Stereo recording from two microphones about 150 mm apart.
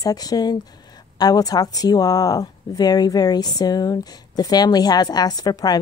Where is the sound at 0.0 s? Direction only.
25° left (ahead or behind).